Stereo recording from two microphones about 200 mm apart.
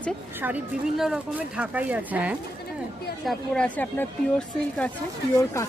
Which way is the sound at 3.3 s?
5° left (ahead or behind).